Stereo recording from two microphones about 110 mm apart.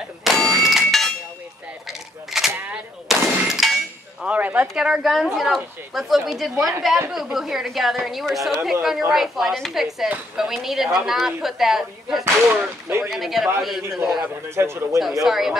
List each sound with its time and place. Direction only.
0.4 s a sound: 5° left (ahead or behind)
2.5 s gunshot: 15° right (ahead or behind)
3.1 s clang: 5° right (ahead or behind)
4.3 s speech: 15° right (ahead or behind)
14.2 s a man's voice: 25° right (ahead or behind)
15.2 s speech: 5° right (ahead or behind)